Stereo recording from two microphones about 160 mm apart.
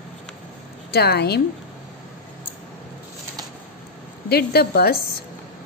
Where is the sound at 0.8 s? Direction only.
85° left.